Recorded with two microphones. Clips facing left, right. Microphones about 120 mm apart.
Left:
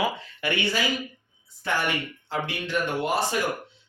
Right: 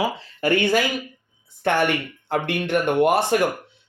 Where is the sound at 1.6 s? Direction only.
65° right (ahead or behind).